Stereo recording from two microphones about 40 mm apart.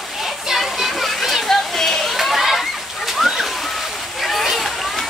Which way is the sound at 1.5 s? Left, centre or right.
Centre.